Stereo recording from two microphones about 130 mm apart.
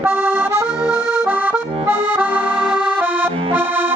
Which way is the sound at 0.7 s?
5° right (ahead or behind).